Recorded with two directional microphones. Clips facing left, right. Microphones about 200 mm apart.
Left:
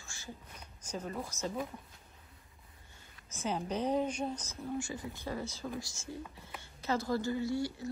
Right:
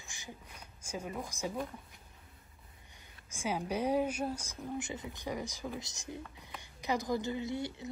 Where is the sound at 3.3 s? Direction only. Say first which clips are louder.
Even; 10° right (ahead or behind).